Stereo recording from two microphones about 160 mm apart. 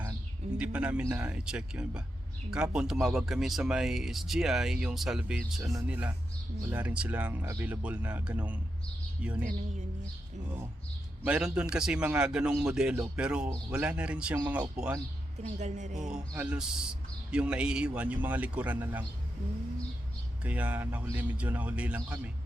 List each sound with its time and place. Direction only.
0.0 s bird: 10° right (ahead or behind)
1.0 s a man's voice: 10° right (ahead or behind)
5.6 s a man's voice: 20° right (ahead or behind)
11.3 s a man's voice: 5° right (ahead or behind)
15.4 s a woman's voice: 45° right (ahead or behind)
16.3 s a man's voice: 10° right (ahead or behind)
20.4 s a man's voice: 10° right (ahead or behind)